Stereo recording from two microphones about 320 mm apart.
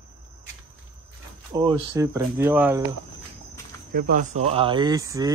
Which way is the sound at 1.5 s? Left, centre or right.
Centre.